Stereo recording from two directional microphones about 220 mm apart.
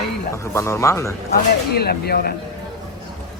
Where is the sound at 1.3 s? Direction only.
45° left (ahead or behind).